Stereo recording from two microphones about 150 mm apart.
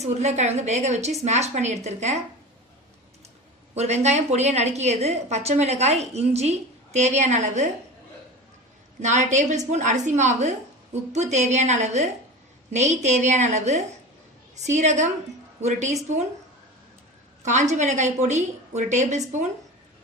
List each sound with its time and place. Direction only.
0.0 s a woman's voice: 50° right (ahead or behind)
3.7 s a woman's voice: 50° right (ahead or behind)
9.0 s a woman's voice: 50° right (ahead or behind)
17.4 s a woman's voice: 50° right (ahead or behind)